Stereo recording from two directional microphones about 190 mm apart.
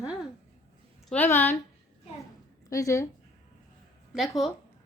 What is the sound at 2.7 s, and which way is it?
Speech, 15° left (ahead or behind).